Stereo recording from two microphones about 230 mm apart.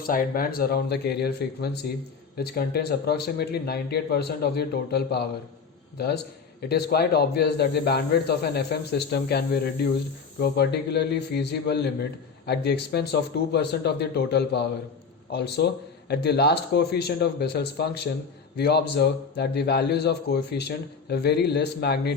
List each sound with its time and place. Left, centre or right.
0.0 s a man's voice: left
6.6 s a man's voice: left